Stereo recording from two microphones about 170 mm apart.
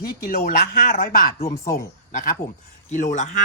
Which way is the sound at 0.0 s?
60° left (ahead or behind).